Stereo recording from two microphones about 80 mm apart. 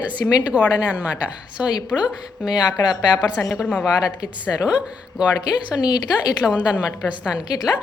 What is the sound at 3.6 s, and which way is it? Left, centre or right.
Speech, left.